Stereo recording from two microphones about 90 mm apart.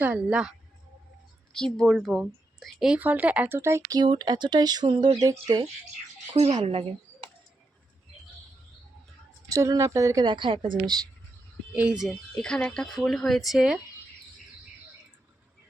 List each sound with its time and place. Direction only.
0.0 s speech: 15° right (ahead or behind)
1.5 s a woman's voice: 5° left (ahead or behind)
3.0 s speech: 20° right (ahead or behind)
3.6 s speech: 30° right (ahead or behind)
3.9 s speech: 55° right (ahead or behind)
6.7 s speech: 90° right
9.5 s speech: 35° right (ahead or behind)
10.2 s a woman's voice: 60° right (ahead or behind)
11.7 s speech: 15° right (ahead or behind)
12.3 s a woman's voice: 10° left (ahead or behind)